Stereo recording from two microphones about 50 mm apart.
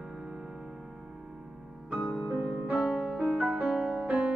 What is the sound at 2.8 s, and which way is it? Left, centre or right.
Music, centre.